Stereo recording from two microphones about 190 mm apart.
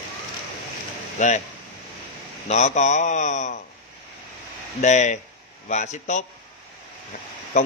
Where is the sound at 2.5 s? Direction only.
35° left (ahead or behind).